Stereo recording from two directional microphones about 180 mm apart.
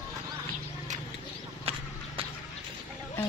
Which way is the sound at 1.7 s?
30° right (ahead or behind).